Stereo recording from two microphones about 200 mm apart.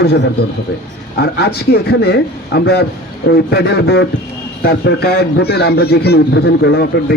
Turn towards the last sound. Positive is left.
turn(degrees=55)  # may be behind; listen again after turning